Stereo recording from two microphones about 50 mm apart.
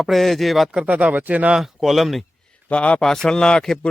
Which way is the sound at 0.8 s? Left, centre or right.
Right.